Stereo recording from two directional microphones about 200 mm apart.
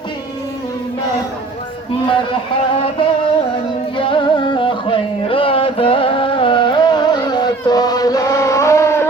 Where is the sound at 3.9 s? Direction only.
25° left (ahead or behind).